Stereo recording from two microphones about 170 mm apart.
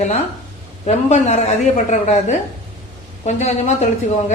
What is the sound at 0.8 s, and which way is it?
A woman's voice, 40° left (ahead or behind).